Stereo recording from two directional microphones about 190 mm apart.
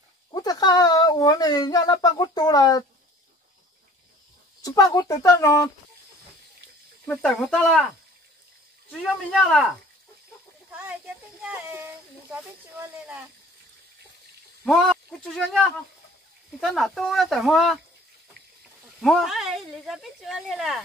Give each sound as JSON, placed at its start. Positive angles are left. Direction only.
{"t": 0.3, "sound": "speech", "side_deg": 20}
{"t": 4.6, "sound": "speech", "side_deg": 20}
{"t": 7.1, "sound": "a woman's voice", "side_deg": 5}
{"t": 9.0, "sound": "a woman's voice", "side_deg": 0}
{"t": 11.4, "sound": "speech", "side_deg": -10}
{"t": 14.6, "sound": "a woman's voice", "side_deg": 0}
{"t": 18.9, "sound": "a woman's voice", "side_deg": 0}